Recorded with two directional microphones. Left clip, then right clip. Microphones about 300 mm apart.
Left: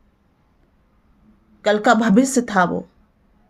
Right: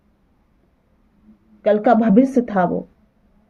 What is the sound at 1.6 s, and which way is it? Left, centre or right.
Speech, centre.